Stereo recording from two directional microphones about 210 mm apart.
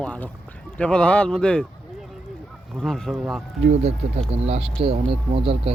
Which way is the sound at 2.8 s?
Centre (ahead or behind).